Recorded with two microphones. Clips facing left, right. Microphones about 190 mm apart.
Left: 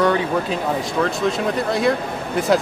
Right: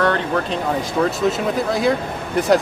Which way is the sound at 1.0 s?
Centre (ahead or behind).